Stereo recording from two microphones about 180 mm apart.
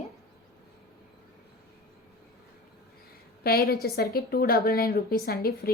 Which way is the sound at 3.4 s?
60° left (ahead or behind).